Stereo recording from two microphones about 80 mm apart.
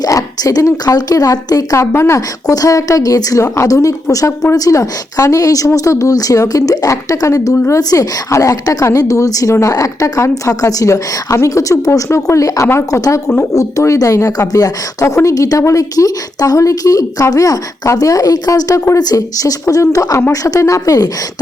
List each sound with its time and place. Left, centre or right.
0.0 s a woman's voice: left